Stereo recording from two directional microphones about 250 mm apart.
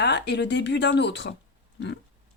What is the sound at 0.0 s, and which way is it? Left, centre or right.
A woman's voice, left.